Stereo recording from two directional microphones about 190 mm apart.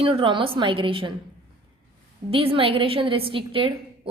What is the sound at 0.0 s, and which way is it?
A woman's voice, 30° right (ahead or behind).